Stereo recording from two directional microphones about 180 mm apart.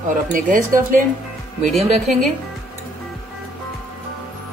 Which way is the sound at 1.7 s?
Centre (ahead or behind).